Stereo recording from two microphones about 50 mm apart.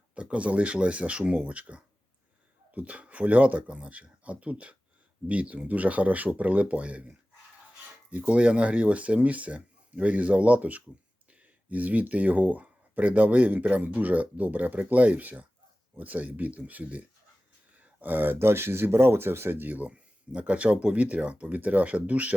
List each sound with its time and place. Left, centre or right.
0.1 s speech: right
8.2 s speech: right
17.7 s a sound: right
18.3 s speech: right